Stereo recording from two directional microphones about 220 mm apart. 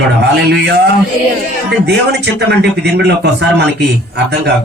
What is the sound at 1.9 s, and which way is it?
A man's voice, 50° right (ahead or behind).